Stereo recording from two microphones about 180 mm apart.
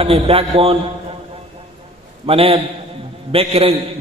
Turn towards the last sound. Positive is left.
turn(degrees=-35)  # may be behind; listen again after turning